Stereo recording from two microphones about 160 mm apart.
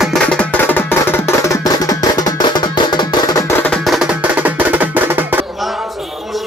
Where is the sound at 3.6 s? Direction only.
5° left (ahead or behind); by 5.4 s 15° right (ahead or behind).